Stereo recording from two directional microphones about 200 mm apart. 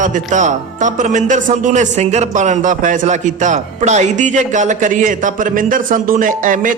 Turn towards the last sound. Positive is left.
turn(degrees=-40)  # may be behind; listen again after turning